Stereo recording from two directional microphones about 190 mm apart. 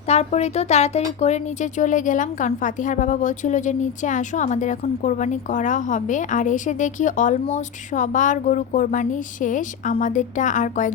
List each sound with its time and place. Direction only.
0.1 s speech: 35° left (ahead or behind)